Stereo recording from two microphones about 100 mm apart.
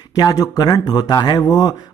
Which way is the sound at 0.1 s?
40° left (ahead or behind).